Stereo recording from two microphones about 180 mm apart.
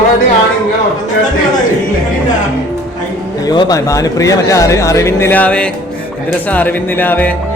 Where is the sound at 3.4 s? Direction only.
25° left (ahead or behind).